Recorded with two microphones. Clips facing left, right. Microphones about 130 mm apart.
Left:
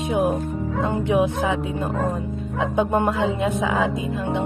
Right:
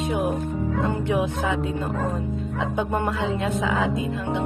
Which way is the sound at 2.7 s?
20° left (ahead or behind).